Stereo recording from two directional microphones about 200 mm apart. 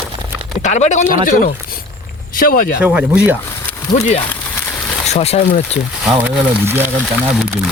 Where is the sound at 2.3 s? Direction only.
45° left (ahead or behind).